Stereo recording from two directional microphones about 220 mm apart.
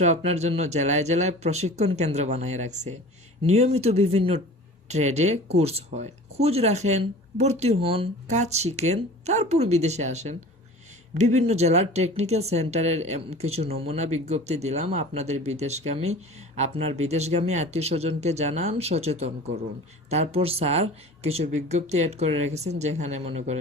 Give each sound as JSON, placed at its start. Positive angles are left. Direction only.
{"t": 0.0, "sound": "speech", "side_deg": -30}